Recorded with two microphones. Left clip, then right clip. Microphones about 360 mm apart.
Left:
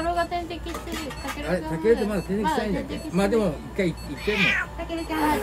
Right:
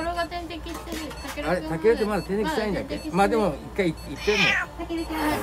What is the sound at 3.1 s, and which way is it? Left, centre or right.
A woman's voice, centre.